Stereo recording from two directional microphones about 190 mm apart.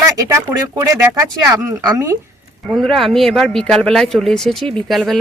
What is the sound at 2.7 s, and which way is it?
Speech, centre (ahead or behind).